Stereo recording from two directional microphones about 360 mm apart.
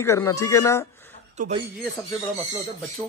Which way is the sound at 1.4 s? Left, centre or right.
Centre.